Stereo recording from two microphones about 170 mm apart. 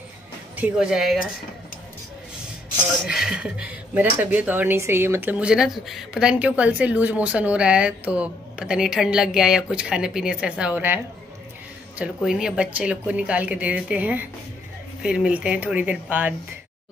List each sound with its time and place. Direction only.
0.6 s speech: 5° right (ahead or behind)
3.1 s speech: 5° right (ahead or behind)
12.0 s speech: 5° right (ahead or behind)